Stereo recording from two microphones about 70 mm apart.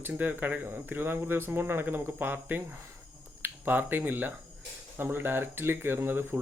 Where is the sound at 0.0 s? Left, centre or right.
Right.